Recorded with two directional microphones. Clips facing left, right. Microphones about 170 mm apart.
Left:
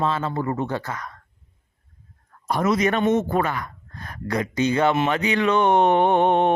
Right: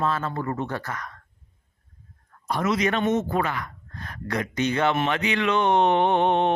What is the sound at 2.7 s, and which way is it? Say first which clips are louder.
Speech: left 3 dB; 45° left (ahead or behind).